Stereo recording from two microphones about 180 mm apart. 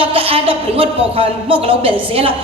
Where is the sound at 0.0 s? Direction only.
30° right (ahead or behind).